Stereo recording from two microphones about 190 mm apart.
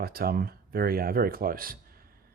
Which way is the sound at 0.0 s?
50° right (ahead or behind).